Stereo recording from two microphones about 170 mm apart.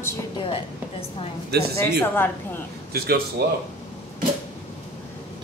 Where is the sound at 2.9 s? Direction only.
65° right (ahead or behind).